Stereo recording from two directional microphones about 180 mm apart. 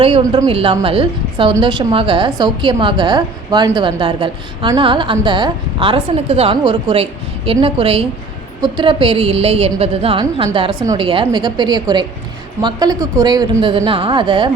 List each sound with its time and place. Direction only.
0.0 s a woman's voice: 25° right (ahead or behind)